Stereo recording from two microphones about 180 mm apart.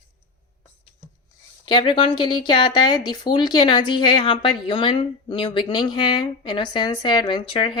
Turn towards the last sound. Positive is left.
turn(degrees=25)  # may be behind; listen again after turning